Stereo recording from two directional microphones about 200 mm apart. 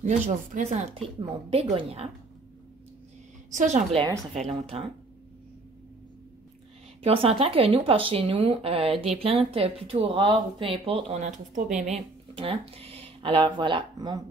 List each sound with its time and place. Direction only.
0.6 s a woman's voice: 35° right (ahead or behind)
3.5 s a woman's voice: 35° right (ahead or behind)
7.0 s speech: 30° right (ahead or behind)
12.4 s speech: 30° right (ahead or behind)